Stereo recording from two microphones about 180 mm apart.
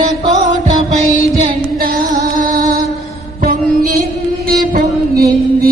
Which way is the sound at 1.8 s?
50° right (ahead or behind).